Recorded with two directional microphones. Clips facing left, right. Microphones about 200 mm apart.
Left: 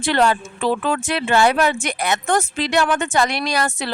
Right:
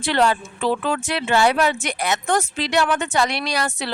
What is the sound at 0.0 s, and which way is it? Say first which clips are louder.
Speech: left 1 dB; 50° left (ahead or behind).